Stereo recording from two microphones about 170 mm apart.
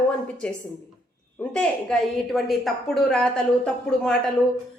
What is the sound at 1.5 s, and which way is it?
A woman's voice, 5° left (ahead or behind).